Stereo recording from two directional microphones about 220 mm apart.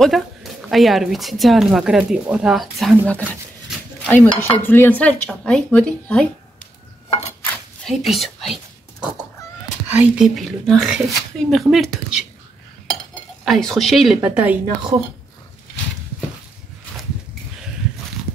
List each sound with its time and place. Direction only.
0.0 s speech: centre (ahead or behind)
4.0 s dishes: 10° left (ahead or behind)
4.4 s speech: 10° left (ahead or behind)
7.1 s a sound: 30° left (ahead or behind)
7.4 s whispering: centre (ahead or behind)
9.8 s speech: 5° right (ahead or behind)
13.5 s speech: centre (ahead or behind)